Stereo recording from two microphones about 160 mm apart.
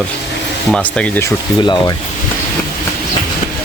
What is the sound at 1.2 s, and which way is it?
Speech, 30° left (ahead or behind).